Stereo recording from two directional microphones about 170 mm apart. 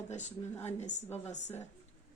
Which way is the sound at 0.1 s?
45° left (ahead or behind).